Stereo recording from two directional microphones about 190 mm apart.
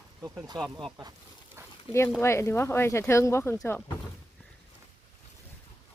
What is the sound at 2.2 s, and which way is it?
Speech, 15° left (ahead or behind).